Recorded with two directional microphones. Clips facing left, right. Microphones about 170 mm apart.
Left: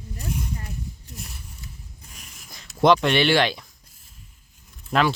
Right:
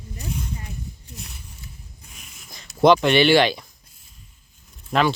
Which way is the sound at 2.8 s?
Centre (ahead or behind).